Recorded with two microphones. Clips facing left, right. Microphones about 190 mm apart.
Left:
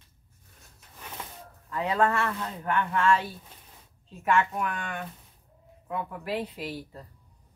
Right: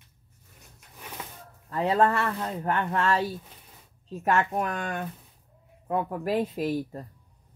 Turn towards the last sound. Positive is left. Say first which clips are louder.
# right 8 dB
turn(degrees=-45)  # may be behind; listen again after turning